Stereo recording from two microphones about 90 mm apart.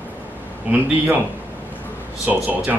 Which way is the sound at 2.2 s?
20° right (ahead or behind).